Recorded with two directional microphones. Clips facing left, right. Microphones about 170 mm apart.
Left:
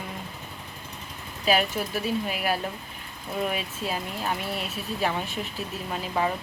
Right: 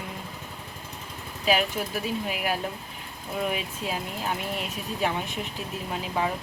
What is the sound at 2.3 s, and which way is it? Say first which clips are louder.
Speech: left 1 dB; 15° right (ahead or behind).